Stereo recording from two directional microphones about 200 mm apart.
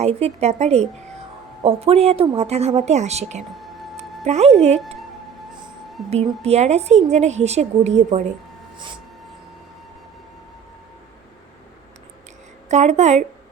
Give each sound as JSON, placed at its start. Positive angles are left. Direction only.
{"t": 0.0, "sound": "a woman's voice", "side_deg": -30}
{"t": 3.9, "sound": "music", "side_deg": -35}
{"t": 6.1, "sound": "a woman's voice", "side_deg": -30}
{"t": 12.6, "sound": "a woman's voice", "side_deg": -35}